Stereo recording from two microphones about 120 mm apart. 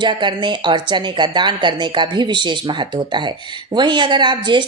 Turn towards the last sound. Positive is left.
turn(degrees=-40)  # may be behind; listen again after turning